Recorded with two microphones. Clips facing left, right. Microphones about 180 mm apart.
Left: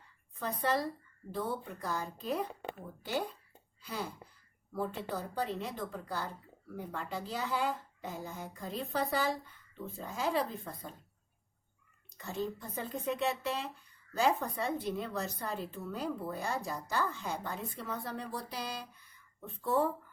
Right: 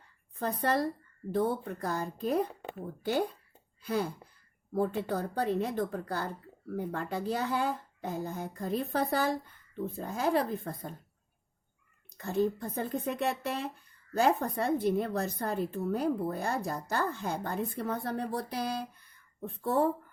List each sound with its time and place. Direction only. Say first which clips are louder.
0.3 s a woman's voice: right 3 dB; 55° right (ahead or behind)
12.1 s a woman's voice: right 8 dB; 55° right (ahead or behind)